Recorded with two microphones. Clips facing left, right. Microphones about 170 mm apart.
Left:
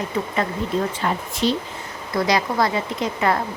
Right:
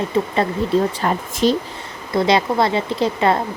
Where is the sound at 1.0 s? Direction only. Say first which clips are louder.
Right 4 dB; 45° right (ahead or behind).